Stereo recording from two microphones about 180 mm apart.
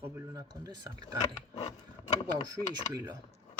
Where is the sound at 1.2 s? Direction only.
40° left (ahead or behind).